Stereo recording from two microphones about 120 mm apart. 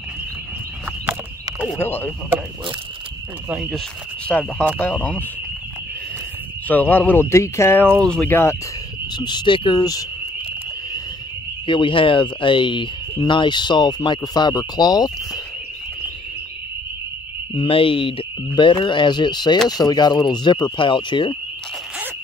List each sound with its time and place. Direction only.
1.7 s speech: 15° left (ahead or behind)
4.3 s speech: 15° left (ahead or behind)
6.7 s speech: 15° left (ahead or behind)
8.0 s speech: 5° left (ahead or behind)
8.3 s speech: 20° left (ahead or behind)
9.1 s speech: 40° left (ahead or behind)
11.6 s speech: 45° left (ahead or behind)
17.6 s speech: 50° left (ahead or behind)